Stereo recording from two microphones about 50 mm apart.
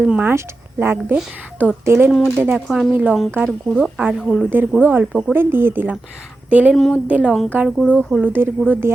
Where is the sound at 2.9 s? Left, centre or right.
Right.